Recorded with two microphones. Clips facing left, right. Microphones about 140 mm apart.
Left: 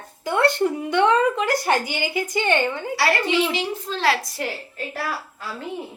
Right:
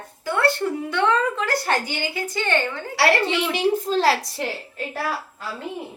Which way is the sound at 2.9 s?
65° right (ahead or behind).